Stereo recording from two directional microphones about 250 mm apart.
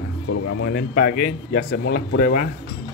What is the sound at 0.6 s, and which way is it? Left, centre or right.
A man's voice, left.